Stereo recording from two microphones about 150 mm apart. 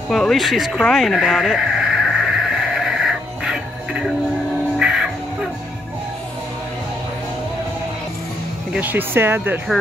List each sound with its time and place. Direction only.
0.1 s a sound: centre (ahead or behind)
4.7 s music: 5° right (ahead or behind)
8.7 s speech: 10° right (ahead or behind)